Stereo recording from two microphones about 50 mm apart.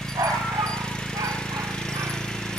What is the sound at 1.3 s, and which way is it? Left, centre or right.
Jackhammer, centre.